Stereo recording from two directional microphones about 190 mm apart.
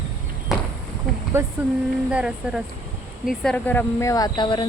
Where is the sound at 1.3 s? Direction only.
15° right (ahead or behind).